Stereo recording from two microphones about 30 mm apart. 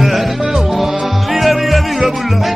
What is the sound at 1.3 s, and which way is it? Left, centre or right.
Music, centre.